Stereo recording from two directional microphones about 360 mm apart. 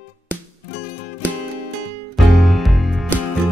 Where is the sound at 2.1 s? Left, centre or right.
Centre.